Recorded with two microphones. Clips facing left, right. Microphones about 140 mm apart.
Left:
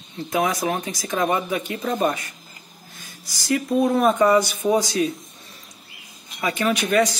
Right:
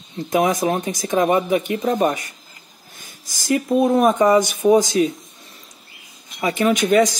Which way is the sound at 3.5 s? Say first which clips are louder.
Right 3 dB; 20° right (ahead or behind).